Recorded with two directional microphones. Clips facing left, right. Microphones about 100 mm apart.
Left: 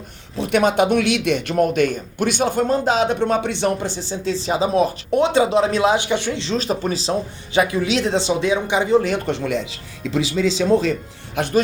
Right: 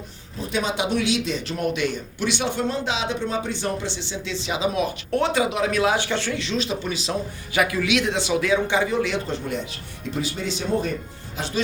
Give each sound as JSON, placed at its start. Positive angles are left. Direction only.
{"t": 0.3, "sound": "speech", "side_deg": 70}
{"t": 1.5, "sound": "speech", "side_deg": 50}
{"t": 3.8, "sound": "speech", "side_deg": 40}
{"t": 5.1, "sound": "speech", "side_deg": 25}
{"t": 6.4, "sound": "speech", "side_deg": 40}
{"t": 8.9, "sound": "speech", "side_deg": 40}
{"t": 9.2, "sound": "speech", "side_deg": 80}
{"t": 11.3, "sound": "speech", "side_deg": 55}